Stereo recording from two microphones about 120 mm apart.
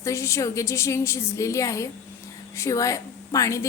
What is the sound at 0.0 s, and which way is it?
A woman's voice, 25° left (ahead or behind).